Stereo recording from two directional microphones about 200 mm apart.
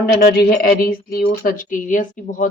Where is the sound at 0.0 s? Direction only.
50° left (ahead or behind).